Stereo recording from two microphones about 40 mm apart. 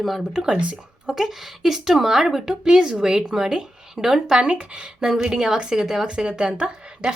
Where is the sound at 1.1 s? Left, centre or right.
Centre.